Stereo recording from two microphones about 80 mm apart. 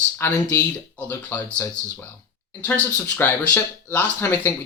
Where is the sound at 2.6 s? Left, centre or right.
Left.